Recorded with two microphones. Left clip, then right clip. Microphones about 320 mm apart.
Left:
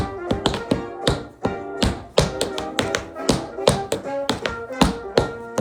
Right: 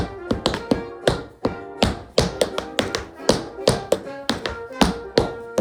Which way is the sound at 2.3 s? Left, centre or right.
Centre.